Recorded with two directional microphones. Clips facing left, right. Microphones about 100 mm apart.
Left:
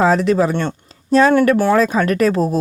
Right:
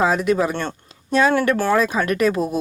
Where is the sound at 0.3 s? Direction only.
30° left (ahead or behind).